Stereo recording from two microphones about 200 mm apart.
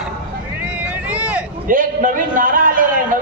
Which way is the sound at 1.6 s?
40° right (ahead or behind).